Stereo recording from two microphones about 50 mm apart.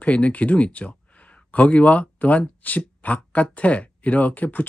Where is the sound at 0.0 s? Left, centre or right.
Left.